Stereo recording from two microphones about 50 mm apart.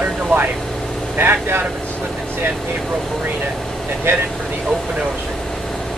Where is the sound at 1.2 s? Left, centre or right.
Right.